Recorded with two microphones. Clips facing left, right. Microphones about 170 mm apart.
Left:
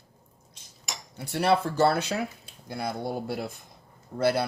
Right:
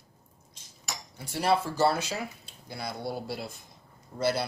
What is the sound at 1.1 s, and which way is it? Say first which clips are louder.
Speech: left 3 dB; 60° left (ahead or behind).